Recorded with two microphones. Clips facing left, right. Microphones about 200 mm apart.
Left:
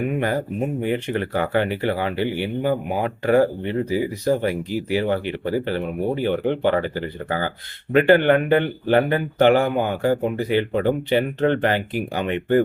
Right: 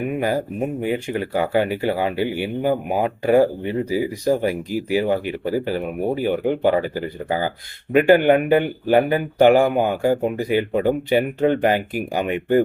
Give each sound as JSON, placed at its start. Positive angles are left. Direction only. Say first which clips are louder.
{"t": 0.8, "sound": "speech", "louder": "even", "side_deg": -10}